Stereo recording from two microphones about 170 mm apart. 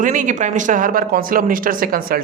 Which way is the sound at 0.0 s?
50° right (ahead or behind).